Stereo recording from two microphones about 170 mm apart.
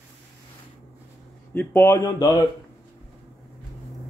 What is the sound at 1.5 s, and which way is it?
Speech, 10° left (ahead or behind).